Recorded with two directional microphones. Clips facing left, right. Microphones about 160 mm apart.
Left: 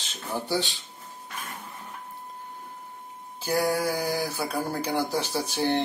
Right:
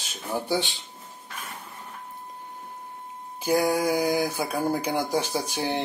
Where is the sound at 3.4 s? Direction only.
15° right (ahead or behind).